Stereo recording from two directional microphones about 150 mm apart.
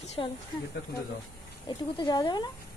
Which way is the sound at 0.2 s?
35° left (ahead or behind).